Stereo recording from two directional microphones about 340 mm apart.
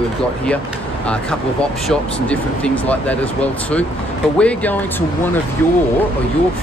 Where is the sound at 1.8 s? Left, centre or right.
Centre.